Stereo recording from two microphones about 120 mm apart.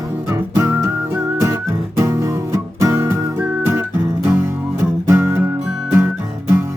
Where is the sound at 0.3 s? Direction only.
20° right (ahead or behind).